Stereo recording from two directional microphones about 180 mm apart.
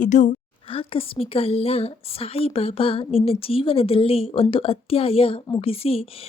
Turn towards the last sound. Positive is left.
turn(degrees=30)  # may be behind; listen again after turning